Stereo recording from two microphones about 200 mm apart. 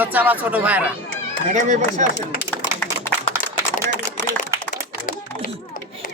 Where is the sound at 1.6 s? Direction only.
40° right (ahead or behind).